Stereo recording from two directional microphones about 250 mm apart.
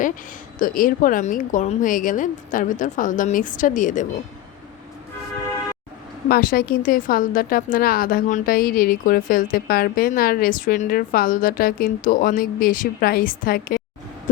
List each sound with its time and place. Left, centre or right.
0.6 s a woman's voice: left
6.2 s a woman's voice: left